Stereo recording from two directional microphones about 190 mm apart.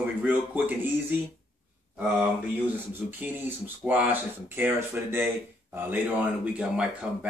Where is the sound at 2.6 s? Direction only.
10° right (ahead or behind).